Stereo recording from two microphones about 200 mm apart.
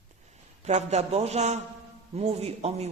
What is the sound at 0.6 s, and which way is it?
A man's voice, 35° right (ahead or behind).